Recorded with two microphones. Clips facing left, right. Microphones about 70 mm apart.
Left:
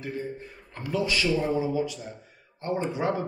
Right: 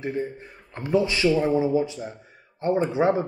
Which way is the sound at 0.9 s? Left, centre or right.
Right.